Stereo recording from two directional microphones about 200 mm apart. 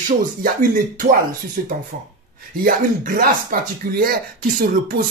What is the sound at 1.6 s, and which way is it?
Speech, 40° right (ahead or behind).